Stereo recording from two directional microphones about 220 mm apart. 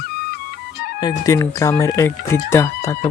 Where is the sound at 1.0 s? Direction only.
15° left (ahead or behind).